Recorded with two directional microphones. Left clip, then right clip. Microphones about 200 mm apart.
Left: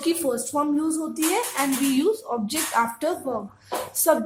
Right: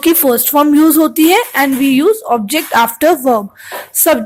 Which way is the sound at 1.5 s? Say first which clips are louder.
Right 12 dB; 30° right (ahead or behind).